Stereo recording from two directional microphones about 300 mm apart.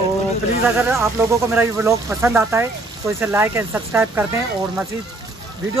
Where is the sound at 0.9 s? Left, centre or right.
Centre.